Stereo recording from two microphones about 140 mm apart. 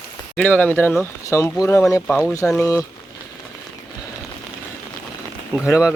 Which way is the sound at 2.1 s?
Centre (ahead or behind).